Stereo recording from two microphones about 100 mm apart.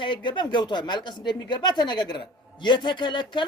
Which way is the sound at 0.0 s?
50° left (ahead or behind).